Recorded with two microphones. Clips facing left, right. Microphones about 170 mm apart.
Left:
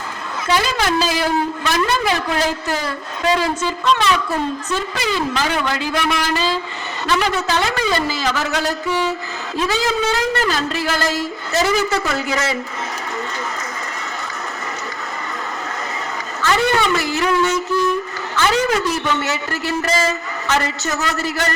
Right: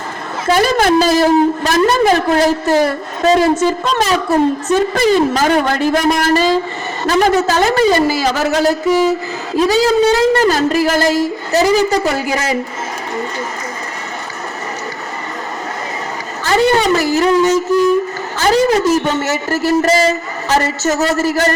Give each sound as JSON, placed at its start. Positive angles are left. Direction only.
{"t": 0.4, "sound": "a woman's voice", "side_deg": -45}
{"t": 16.4, "sound": "a man's voice", "side_deg": -35}